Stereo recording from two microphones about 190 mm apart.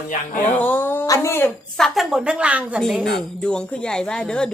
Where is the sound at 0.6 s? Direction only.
10° left (ahead or behind).